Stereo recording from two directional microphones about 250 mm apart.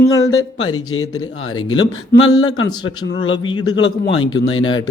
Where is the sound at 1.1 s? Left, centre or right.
Centre.